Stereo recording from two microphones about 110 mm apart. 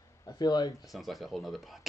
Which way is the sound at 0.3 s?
35° left (ahead or behind).